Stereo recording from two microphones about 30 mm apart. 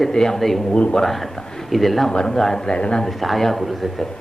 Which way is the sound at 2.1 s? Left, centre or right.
Left.